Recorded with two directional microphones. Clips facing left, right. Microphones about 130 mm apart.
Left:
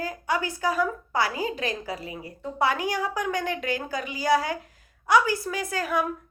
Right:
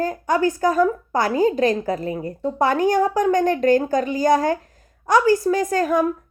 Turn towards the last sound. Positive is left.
turn(degrees=-40)  # may be behind; listen again after turning